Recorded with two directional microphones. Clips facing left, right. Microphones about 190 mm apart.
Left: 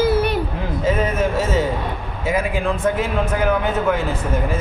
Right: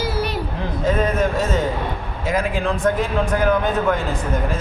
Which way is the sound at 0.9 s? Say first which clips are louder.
Even; 5° left (ahead or behind).